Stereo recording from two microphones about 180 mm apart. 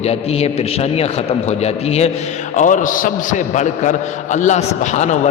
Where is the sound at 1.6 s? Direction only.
35° left (ahead or behind).